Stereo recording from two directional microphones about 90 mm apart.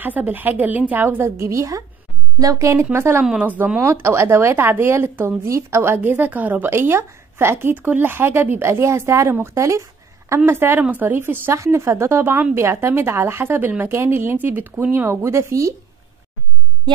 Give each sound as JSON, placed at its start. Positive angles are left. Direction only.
{"t": 0.0, "sound": "a woman's voice", "side_deg": -20}
{"t": 3.3, "sound": "a woman's voice", "side_deg": -15}
{"t": 3.8, "sound": "a woman's voice", "side_deg": -30}